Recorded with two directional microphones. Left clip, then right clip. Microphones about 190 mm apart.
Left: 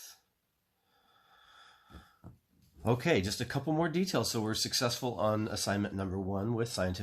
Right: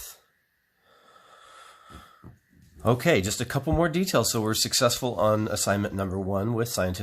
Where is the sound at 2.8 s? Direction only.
35° right (ahead or behind).